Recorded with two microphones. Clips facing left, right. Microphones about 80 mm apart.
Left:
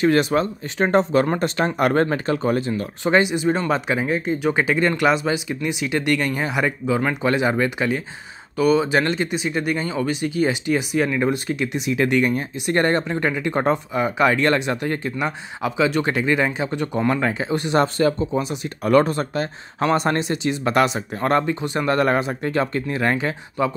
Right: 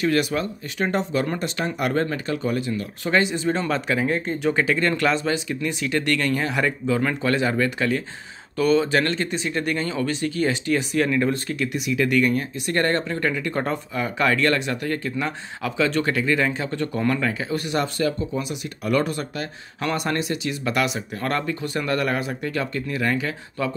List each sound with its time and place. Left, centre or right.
0.0 s speech: left
3.0 s speech: left
4.1 s speech: centre; by 23.7 s left